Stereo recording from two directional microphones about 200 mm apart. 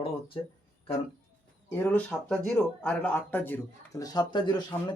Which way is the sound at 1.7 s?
10° left (ahead or behind).